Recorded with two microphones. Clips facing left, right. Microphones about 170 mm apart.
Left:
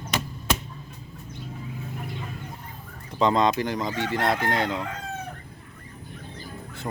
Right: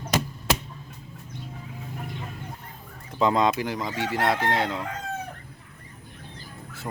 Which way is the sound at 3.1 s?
5° right (ahead or behind).